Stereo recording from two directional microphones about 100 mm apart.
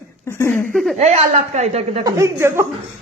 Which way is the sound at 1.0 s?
90° right.